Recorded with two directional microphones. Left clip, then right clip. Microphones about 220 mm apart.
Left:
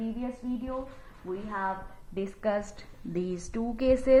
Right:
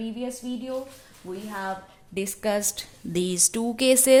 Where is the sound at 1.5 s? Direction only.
70° right (ahead or behind); by 3.6 s 85° right.